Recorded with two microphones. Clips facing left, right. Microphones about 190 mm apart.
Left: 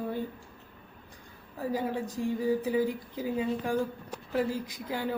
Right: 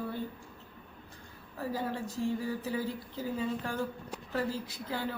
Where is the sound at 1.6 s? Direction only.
15° left (ahead or behind).